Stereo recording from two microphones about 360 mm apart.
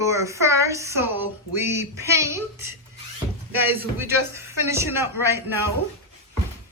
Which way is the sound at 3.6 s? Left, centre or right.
Centre.